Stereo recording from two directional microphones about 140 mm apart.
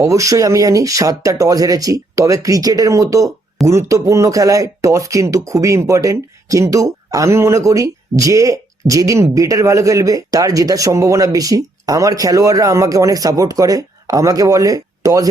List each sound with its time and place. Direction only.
0.0 s speech: 20° right (ahead or behind)